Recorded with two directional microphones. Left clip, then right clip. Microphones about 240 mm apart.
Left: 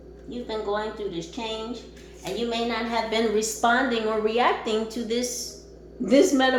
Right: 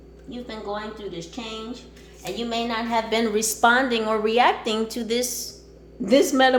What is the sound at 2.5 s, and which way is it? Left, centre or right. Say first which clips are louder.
A woman's voice: right 3 dB; right.